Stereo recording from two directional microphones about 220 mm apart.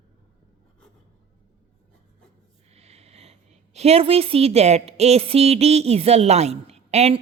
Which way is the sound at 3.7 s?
30° right (ahead or behind).